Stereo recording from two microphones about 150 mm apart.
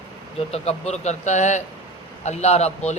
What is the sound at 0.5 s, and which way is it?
A man's voice, 45° left (ahead or behind).